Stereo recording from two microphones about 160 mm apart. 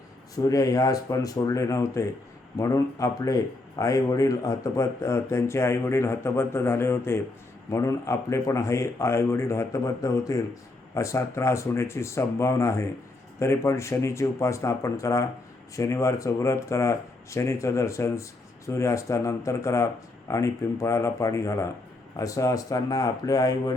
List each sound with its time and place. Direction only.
0.3 s speech: 20° left (ahead or behind)